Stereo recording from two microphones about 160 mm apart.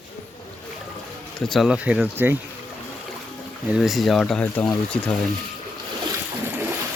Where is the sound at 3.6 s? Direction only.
5° right (ahead or behind).